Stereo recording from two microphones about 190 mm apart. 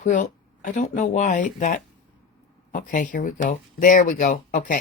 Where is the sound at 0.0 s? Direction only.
40° left (ahead or behind).